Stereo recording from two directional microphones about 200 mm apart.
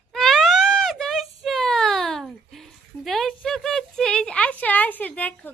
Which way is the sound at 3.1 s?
Centre (ahead or behind).